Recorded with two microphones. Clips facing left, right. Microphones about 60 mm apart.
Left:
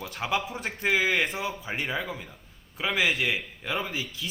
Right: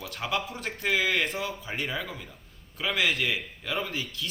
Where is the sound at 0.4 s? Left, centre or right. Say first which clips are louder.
Left 2 dB; centre.